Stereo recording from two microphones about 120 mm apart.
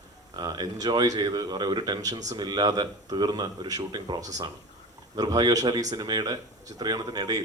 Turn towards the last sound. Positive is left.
turn(degrees=-35)  # may be behind; listen again after turning